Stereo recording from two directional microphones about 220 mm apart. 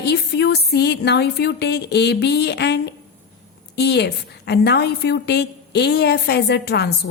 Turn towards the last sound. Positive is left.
turn(degrees=50)  # may be behind; listen again after turning